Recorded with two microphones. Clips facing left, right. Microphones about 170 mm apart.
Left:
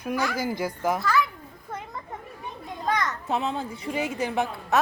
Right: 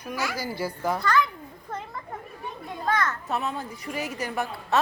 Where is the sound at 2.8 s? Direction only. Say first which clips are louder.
Even; 15° left (ahead or behind).